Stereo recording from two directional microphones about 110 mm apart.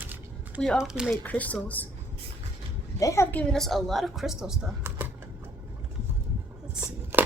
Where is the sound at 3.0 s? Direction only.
30° left (ahead or behind); by 4.7 s 5° right (ahead or behind).